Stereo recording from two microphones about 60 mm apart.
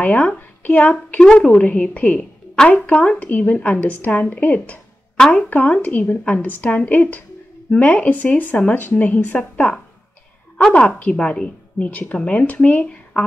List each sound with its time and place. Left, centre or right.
0.0 s speech: left
1.2 s speech: centre
5.1 s a woman's voice: centre